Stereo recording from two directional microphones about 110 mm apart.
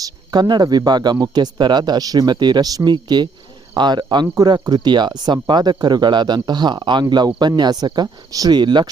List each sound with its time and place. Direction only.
0.0 s speech: 40° right (ahead or behind)